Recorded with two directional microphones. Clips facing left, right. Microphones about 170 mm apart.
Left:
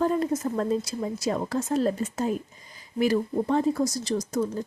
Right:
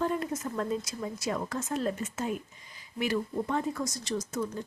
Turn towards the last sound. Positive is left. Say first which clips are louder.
# left 6 dB
turn(degrees=35)  # may be behind; listen again after turning